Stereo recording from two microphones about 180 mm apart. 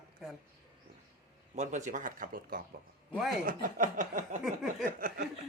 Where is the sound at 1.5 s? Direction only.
45° right (ahead or behind).